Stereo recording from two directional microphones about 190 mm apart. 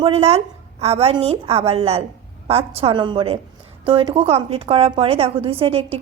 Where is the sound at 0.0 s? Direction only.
30° right (ahead or behind).